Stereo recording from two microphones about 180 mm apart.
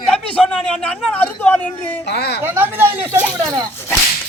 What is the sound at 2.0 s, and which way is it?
Speech, 65° left (ahead or behind).